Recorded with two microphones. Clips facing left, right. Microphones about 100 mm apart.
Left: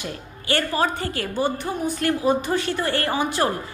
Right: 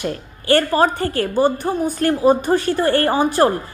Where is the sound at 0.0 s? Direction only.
45° right (ahead or behind).